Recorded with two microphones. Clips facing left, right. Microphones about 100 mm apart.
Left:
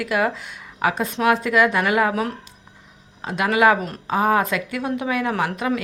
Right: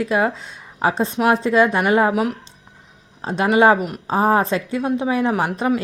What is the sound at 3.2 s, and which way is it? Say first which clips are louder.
A woman's voice: right 3 dB; 30° right (ahead or behind).